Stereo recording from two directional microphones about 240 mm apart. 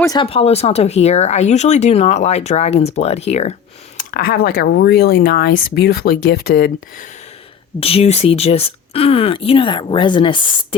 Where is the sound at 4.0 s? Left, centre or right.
Left.